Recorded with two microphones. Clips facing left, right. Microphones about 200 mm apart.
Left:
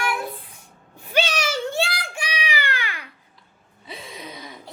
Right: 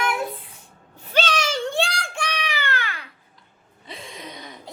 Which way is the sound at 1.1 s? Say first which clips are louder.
Even; 10° left (ahead or behind).